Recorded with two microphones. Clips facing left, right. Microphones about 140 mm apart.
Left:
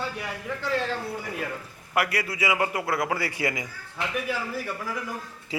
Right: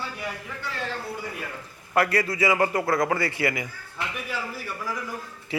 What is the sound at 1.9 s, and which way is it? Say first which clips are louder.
A man's voice: right 4 dB; 10° left (ahead or behind).